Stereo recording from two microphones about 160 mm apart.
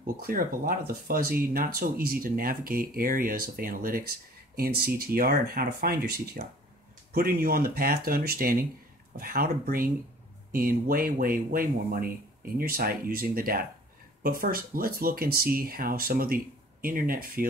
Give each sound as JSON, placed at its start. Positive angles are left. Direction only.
{"t": 0.0, "sound": "speech", "side_deg": -65}
{"t": 6.4, "sound": "speech", "side_deg": -50}
{"t": 7.1, "sound": "speech", "side_deg": -70}